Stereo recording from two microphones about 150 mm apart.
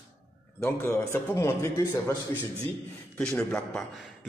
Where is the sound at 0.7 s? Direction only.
15° left (ahead or behind).